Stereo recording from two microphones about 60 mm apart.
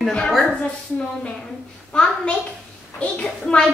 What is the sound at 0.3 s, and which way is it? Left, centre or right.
Speech, centre.